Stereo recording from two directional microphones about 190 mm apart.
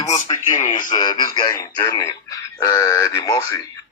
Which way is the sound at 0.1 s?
40° left (ahead or behind).